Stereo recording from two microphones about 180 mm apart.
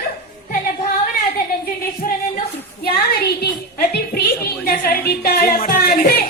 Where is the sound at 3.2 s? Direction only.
60° left (ahead or behind).